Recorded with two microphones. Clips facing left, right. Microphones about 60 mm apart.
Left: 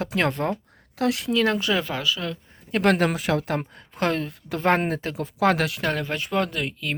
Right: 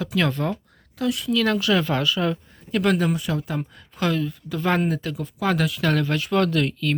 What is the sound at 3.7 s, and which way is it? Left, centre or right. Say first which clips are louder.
Speech: right 3 dB; left.